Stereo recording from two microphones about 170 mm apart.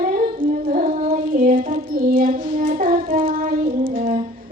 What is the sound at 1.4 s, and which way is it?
Music, 55° right (ahead or behind).